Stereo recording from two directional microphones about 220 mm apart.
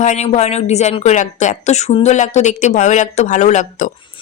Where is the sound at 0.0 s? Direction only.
30° left (ahead or behind).